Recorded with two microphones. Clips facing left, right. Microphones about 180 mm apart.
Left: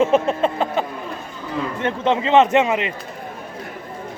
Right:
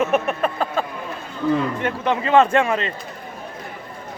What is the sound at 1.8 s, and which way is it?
Speech, 20° left (ahead or behind).